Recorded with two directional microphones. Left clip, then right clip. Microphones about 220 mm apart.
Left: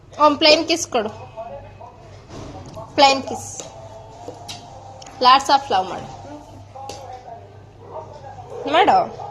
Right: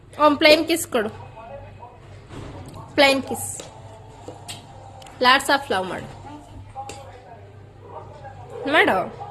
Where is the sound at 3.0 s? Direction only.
25° right (ahead or behind).